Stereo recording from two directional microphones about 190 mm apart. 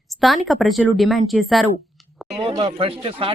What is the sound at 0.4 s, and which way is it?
Speech, centre (ahead or behind).